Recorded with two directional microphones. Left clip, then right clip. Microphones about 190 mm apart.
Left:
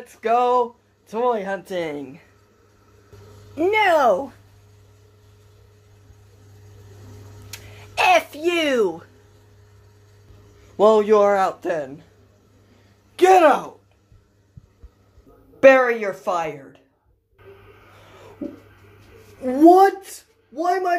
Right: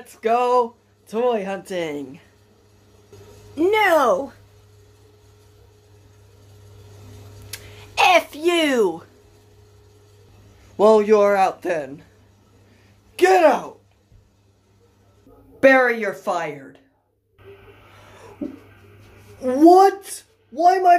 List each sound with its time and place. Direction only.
0.0 s speech: 10° right (ahead or behind)
3.5 s speech: 15° right (ahead or behind)
7.5 s a child's voice: 5° right (ahead or behind)
10.8 s a man's voice: centre (ahead or behind)
13.1 s a man's voice: 10° left (ahead or behind)
15.6 s speech: 10° right (ahead or behind)
19.4 s a man's voice: 5° right (ahead or behind)